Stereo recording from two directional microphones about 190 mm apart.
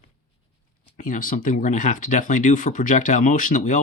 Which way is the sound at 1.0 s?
45° left (ahead or behind).